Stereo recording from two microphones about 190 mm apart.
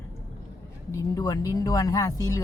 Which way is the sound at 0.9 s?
20° left (ahead or behind).